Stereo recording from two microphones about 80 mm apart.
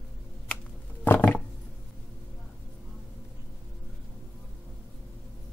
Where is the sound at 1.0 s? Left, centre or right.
Left.